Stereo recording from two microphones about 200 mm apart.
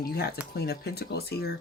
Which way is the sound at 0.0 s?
50° left (ahead or behind).